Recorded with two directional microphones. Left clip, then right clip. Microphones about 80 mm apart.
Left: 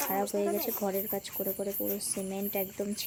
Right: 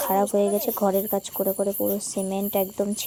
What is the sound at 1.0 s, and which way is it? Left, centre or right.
Speech, right.